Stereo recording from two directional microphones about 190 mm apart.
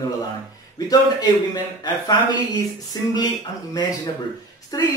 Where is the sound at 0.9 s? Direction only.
20° left (ahead or behind).